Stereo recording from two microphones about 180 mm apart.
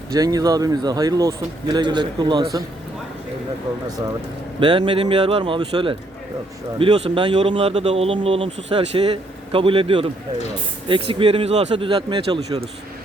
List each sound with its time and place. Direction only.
0.1 s speech: 20° right (ahead or behind)
4.6 s speech: 25° right (ahead or behind)